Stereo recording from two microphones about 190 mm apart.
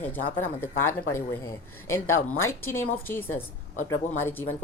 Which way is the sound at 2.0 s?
90° left.